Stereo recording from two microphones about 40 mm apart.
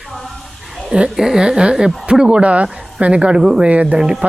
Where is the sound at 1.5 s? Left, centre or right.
Right.